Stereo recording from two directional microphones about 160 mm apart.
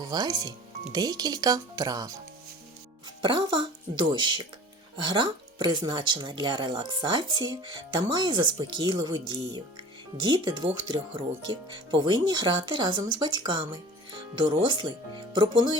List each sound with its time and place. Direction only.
0.0 s speech: 25° right (ahead or behind)
3.2 s speech: 30° right (ahead or behind)